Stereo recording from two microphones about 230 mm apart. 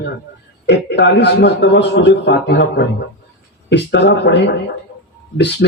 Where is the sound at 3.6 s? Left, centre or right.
Left.